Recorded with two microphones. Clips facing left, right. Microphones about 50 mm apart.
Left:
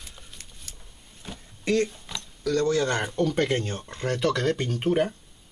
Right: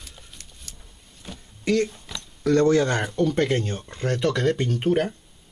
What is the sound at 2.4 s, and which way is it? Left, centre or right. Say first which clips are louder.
Speech: right 6 dB; right.